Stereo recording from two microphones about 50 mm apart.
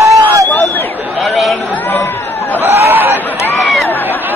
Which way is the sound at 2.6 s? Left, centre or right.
Right.